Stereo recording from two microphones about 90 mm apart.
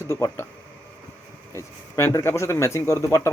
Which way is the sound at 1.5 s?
30° left (ahead or behind).